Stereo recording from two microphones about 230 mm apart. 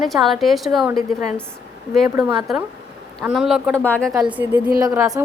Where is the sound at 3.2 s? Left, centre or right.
Centre.